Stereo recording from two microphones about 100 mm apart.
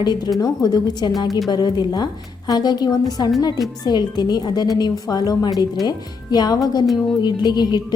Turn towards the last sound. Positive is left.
turn(degrees=45)  # may be behind; listen again after turning